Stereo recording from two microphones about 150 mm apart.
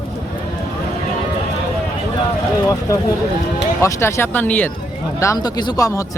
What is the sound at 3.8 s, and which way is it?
Speech, 20° left (ahead or behind).